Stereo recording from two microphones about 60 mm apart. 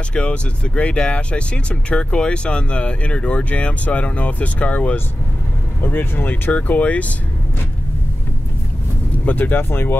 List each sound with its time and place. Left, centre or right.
0.1 s speech: left
5.8 s speech: left
9.2 s speech: left